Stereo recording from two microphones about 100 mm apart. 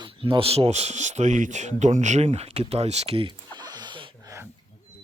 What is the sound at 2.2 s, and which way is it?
Speech, 90° right.